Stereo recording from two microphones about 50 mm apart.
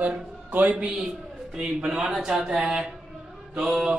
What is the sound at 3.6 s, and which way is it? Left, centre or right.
Mantra, centre.